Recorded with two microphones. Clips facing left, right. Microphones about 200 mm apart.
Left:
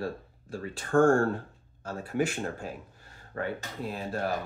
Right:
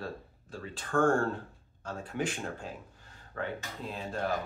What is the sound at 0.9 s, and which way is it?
Speech, 25° left (ahead or behind).